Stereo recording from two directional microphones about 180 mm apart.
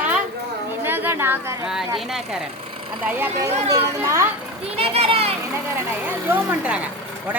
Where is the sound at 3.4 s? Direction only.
35° right (ahead or behind).